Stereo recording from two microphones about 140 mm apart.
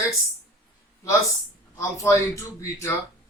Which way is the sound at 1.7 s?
20° left (ahead or behind).